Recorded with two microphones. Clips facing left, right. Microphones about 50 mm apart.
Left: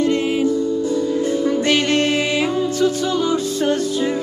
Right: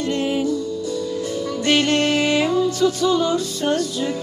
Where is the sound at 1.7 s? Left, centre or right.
Left.